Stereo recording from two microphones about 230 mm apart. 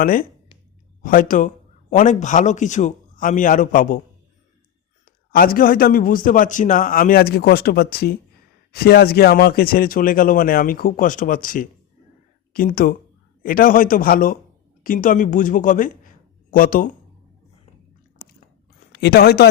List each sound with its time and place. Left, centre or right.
0.0 s a man's voice: left
5.0 s a man's voice: left
18.9 s speech: left